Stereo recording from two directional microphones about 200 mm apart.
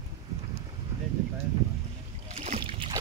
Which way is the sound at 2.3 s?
35° right (ahead or behind).